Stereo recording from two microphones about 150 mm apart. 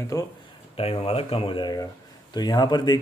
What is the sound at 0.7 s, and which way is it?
Speech, 40° left (ahead or behind).